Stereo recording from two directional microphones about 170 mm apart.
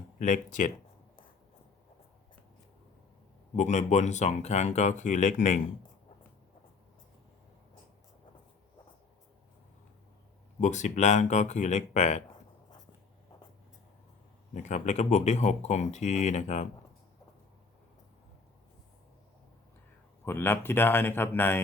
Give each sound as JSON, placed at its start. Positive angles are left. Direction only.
{"t": 0.2, "sound": "speech", "side_deg": 50}
{"t": 3.5, "sound": "speech", "side_deg": 45}
{"t": 10.6, "sound": "speech", "side_deg": 45}
{"t": 14.5, "sound": "speech", "side_deg": 45}
{"t": 20.2, "sound": "speech", "side_deg": 15}